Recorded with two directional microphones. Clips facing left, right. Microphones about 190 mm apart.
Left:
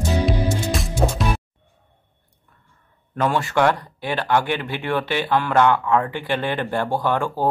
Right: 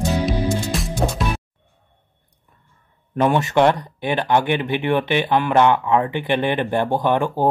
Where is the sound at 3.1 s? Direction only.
20° right (ahead or behind).